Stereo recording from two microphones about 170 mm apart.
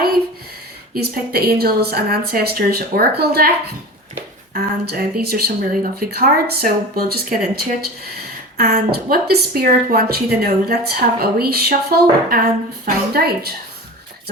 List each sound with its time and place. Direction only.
0.9 s a woman's voice: 65° right (ahead or behind)
4.5 s a woman's voice: 70° right (ahead or behind)